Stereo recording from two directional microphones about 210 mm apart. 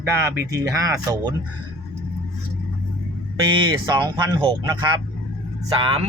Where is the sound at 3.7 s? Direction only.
20° right (ahead or behind).